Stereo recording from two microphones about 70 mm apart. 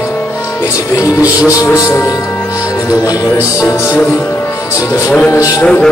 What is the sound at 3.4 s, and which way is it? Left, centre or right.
Music, left.